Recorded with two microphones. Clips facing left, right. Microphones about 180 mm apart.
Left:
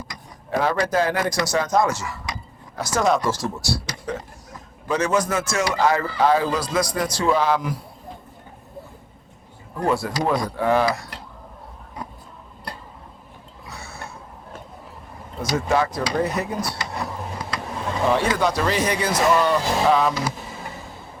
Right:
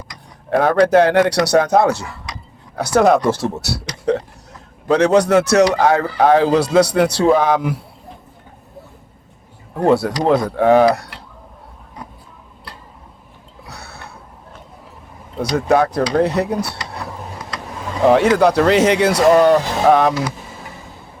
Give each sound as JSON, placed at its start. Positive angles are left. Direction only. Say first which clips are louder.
{"t": 0.5, "sound": "a man's voice", "louder": "right 9 dB", "side_deg": -60}
{"t": 3.6, "sound": "a sound", "louder": "right 1 dB", "side_deg": -65}
{"t": 4.9, "sound": "a man's voice", "louder": "right 9 dB", "side_deg": -65}
{"t": 9.9, "sound": "a man's voice", "louder": "right 7 dB", "side_deg": -70}
{"t": 11.1, "sound": "a sound", "louder": "even", "side_deg": 40}
{"t": 13.7, "sound": "a sound", "louder": "right 1 dB", "side_deg": -70}
{"t": 15.5, "sound": "a man's voice", "louder": "right 6 dB", "side_deg": -60}
{"t": 18.0, "sound": "a man's voice", "louder": "right 9 dB", "side_deg": -70}
{"t": 19.3, "sound": "speech", "louder": "right 8 dB", "side_deg": -55}